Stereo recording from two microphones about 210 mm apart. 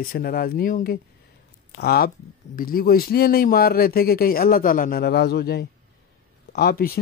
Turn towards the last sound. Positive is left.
turn(degrees=45)  # may be behind; listen again after turning